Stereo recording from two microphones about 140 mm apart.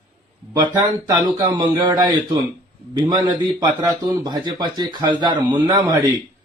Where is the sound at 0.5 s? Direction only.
30° right (ahead or behind).